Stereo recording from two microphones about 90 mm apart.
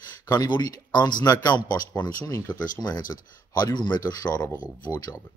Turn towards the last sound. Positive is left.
turn(degrees=50)  # may be behind; listen again after turning